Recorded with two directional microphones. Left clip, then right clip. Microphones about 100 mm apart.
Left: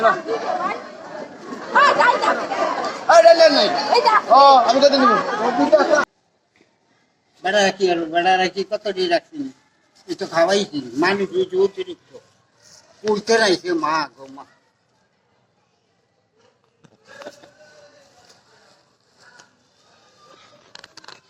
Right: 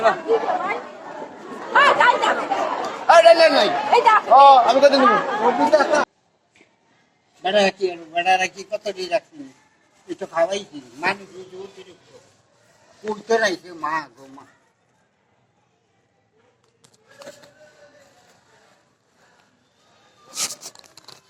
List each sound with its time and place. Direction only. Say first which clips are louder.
0.0 s a man's voice: even; 30° left (ahead or behind)
7.3 s a man's voice: left 1 dB; 30° left (ahead or behind)
11.0 s a man's voice: left 6 dB; 20° left (ahead or behind)
13.0 s speech: left 3 dB; 30° left (ahead or behind)
16.8 s a sound: left 4 dB; 25° left (ahead or behind)